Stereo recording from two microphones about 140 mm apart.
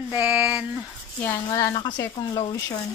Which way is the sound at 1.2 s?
20° left (ahead or behind).